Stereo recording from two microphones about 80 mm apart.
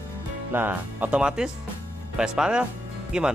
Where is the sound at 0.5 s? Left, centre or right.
Right.